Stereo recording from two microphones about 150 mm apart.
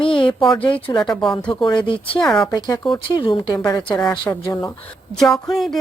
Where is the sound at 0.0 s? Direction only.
35° left (ahead or behind).